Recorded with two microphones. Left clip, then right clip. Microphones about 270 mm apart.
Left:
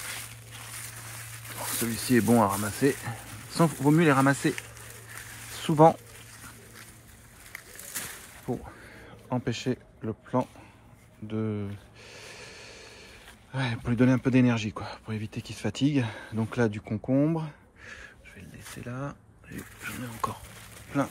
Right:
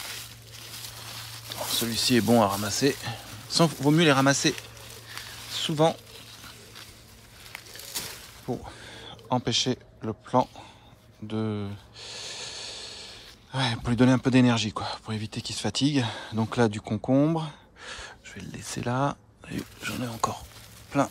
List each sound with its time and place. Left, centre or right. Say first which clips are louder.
1.6 s speech: right 6 dB; centre
5.6 s speech: left 4 dB; centre
8.5 s speech: right 1 dB; centre
17.8 s speech: right 5 dB; centre